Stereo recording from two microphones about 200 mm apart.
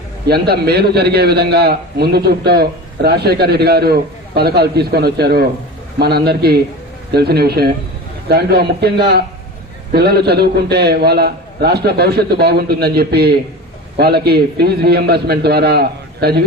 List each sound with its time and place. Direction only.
0.3 s a man's voice: 55° right (ahead or behind)